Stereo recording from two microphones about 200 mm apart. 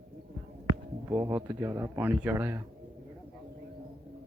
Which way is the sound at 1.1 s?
15° right (ahead or behind).